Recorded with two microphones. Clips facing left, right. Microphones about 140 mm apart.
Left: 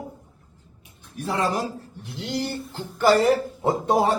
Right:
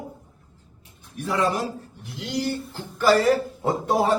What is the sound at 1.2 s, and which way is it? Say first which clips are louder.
A man's voice: right 1 dB; 35° left (ahead or behind).